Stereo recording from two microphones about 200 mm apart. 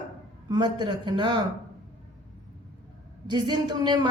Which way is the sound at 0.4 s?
20° right (ahead or behind).